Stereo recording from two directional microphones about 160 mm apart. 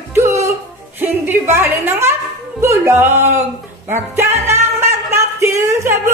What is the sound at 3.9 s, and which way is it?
Music, 15° right (ahead or behind).